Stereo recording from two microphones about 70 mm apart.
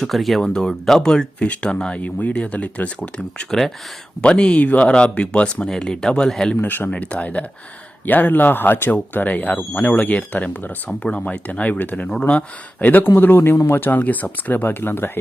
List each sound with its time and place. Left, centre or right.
0.0 s speech: centre
6.6 s a man's voice: left